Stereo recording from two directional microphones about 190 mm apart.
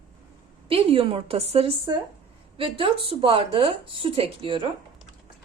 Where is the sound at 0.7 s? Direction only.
30° right (ahead or behind).